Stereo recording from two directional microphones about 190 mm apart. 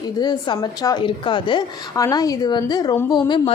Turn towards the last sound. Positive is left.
turn(degrees=20)  # may be behind; listen again after turning